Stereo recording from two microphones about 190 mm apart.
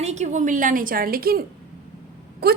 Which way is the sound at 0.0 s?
35° right (ahead or behind).